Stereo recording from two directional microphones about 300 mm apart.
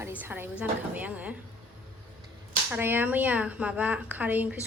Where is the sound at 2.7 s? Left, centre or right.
Centre.